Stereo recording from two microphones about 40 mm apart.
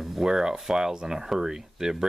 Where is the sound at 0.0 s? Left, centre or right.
Centre.